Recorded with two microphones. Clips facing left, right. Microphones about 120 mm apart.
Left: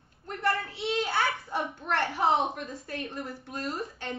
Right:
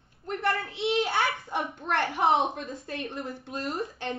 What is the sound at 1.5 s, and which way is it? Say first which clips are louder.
A woman's voice: right 1 dB; 20° right (ahead or behind).